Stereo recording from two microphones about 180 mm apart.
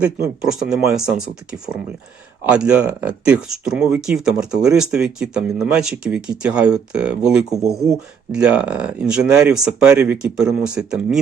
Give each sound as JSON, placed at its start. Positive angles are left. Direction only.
{"t": 0.0, "sound": "speech", "side_deg": -5}